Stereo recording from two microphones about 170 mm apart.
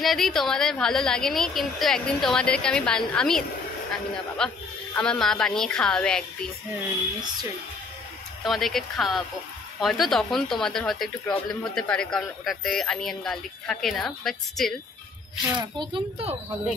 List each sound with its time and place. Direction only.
0.0 s speech: centre (ahead or behind)
8.5 s speech: centre (ahead or behind)
15.5 s a child's voice: 25° right (ahead or behind)